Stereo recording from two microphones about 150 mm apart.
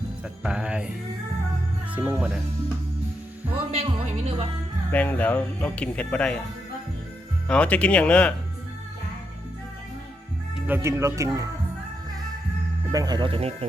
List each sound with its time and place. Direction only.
0.4 s speech: 5° right (ahead or behind)
1.9 s speech: 10° right (ahead or behind)
3.7 s speech: 45° right (ahead or behind)
4.9 s speech: 10° left (ahead or behind)
7.4 s speech: 10° left (ahead or behind)
10.7 s speech: 20° right (ahead or behind)
12.9 s speech: 25° right (ahead or behind)